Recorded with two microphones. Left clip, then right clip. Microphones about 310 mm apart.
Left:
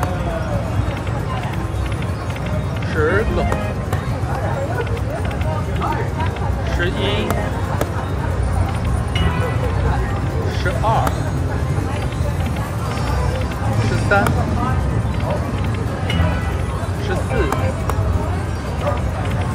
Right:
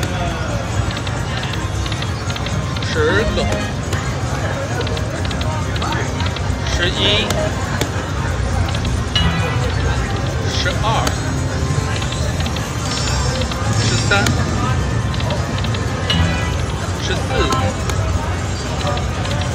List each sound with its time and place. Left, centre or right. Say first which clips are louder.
3.0 s music: right 1 dB; centre
6.8 s speech: right 5 dB; centre
14.1 s speech: left 1 dB; centre